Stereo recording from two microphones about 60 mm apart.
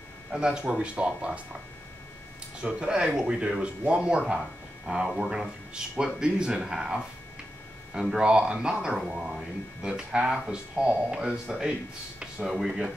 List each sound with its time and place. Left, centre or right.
0.3 s speech: centre
2.6 s speech: centre